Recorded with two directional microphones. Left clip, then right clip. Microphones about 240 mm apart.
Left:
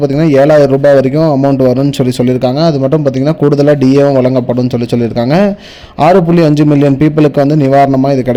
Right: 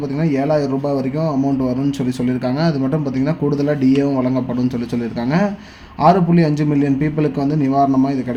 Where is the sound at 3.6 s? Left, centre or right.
Left.